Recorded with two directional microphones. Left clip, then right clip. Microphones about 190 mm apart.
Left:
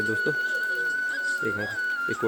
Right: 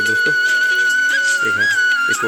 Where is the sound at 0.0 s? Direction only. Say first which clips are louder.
Right 11 dB; 15° right (ahead or behind).